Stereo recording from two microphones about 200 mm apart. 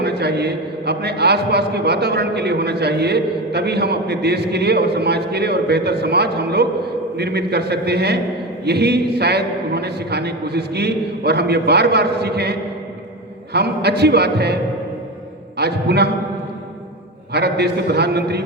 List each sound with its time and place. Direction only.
0.0 s a man's voice: 55° right (ahead or behind)
17.3 s a man's voice: 55° right (ahead or behind)